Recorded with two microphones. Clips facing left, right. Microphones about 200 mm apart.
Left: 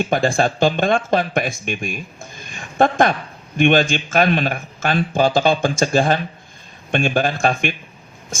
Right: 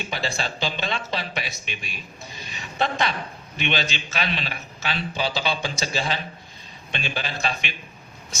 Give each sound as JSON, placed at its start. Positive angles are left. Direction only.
{"t": 0.0, "sound": "speech", "side_deg": 50}